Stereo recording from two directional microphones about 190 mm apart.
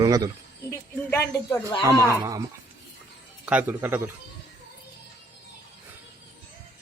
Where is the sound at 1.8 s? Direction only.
20° right (ahead or behind).